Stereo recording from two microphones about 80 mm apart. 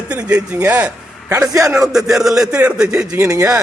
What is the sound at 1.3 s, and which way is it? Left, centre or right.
Speech, right.